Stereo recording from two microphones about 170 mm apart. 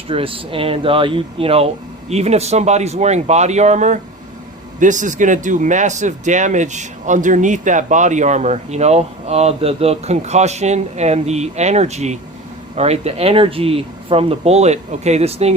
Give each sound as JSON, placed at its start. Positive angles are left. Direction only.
{"t": 0.1, "sound": "speech", "side_deg": -35}